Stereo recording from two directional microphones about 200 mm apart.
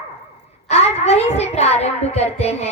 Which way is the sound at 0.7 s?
30° left (ahead or behind).